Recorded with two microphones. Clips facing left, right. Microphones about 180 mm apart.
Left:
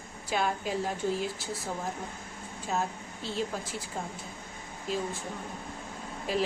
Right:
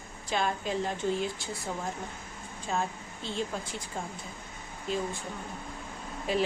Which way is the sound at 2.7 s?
5° left (ahead or behind).